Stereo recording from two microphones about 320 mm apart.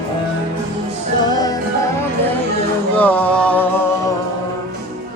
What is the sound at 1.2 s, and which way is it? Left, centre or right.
Music, centre.